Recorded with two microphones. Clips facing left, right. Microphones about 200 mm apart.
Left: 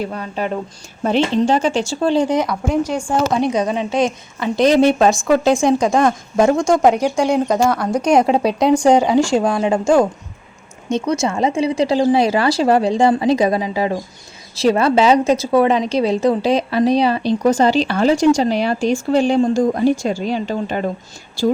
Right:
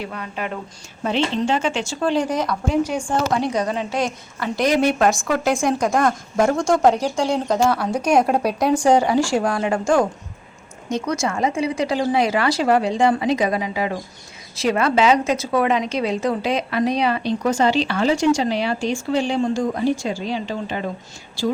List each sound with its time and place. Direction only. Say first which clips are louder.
0.0 s a woman's voice: left 6 dB; 35° left (ahead or behind); by 7.6 s 15° left (ahead or behind)
7.6 s speech: left 3 dB; 5° right (ahead or behind)
8.3 s a woman's voice: left 4 dB; 20° left (ahead or behind); by 20.8 s 50° left (ahead or behind)